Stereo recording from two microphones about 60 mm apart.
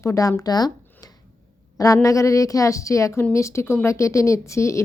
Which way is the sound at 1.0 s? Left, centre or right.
Left.